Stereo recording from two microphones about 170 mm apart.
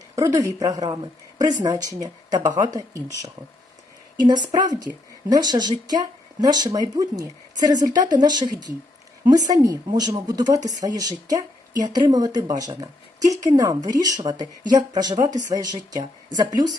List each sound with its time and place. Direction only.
0.2 s speech: 20° right (ahead or behind)
4.3 s speech: 25° right (ahead or behind)